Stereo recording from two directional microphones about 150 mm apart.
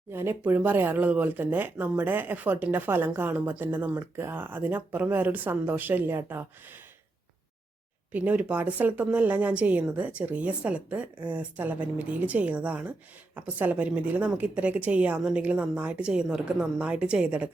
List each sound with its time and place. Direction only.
0.1 s speech: 15° right (ahead or behind)
8.1 s speech: 10° right (ahead or behind)